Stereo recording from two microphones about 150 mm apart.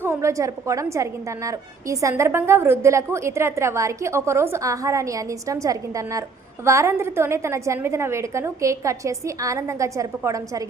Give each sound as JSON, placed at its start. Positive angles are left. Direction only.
{"t": 0.0, "sound": "a woman's voice", "side_deg": -20}